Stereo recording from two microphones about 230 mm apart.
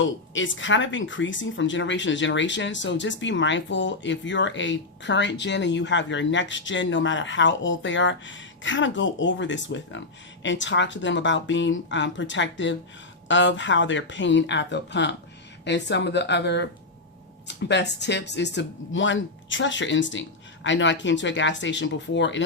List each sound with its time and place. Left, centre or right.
0.0 s speech: left